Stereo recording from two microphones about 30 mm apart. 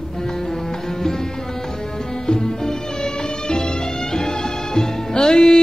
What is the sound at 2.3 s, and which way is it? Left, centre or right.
Music, left.